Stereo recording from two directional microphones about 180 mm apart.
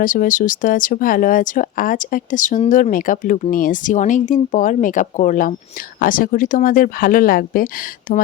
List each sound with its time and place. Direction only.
0.0 s speech: 45° left (ahead or behind)